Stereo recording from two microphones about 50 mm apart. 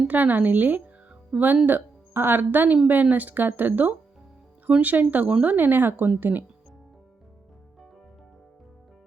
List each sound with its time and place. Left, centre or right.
0.1 s speech: right
1.3 s speech: centre
1.6 s speech: right